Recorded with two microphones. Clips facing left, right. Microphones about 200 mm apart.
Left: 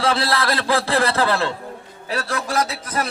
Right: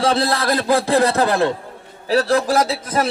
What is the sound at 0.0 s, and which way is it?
A man's voice, 20° right (ahead or behind).